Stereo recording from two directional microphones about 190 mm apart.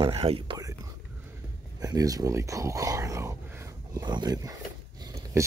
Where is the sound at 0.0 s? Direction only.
30° right (ahead or behind).